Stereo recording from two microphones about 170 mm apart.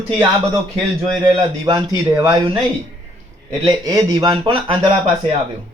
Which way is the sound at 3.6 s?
20° right (ahead or behind).